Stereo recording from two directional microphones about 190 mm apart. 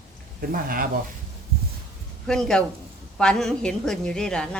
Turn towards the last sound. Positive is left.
turn(degrees=5)  # may be behind; listen again after turning